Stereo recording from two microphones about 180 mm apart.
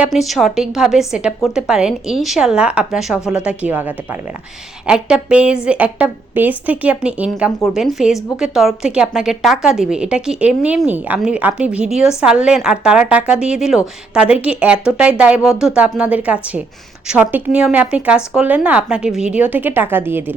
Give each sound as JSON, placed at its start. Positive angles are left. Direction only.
{"t": 0.0, "sound": "a woman's voice", "side_deg": 0}